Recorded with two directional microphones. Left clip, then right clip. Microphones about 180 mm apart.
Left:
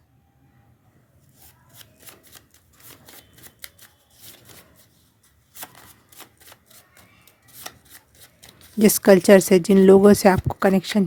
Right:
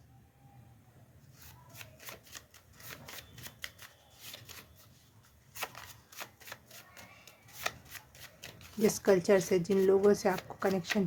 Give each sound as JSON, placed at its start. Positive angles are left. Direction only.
{"t": 8.8, "sound": "speech", "side_deg": 50}